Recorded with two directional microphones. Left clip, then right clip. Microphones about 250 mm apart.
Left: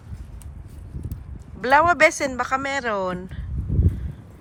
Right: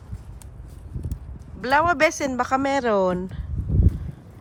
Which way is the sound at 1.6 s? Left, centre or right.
Centre.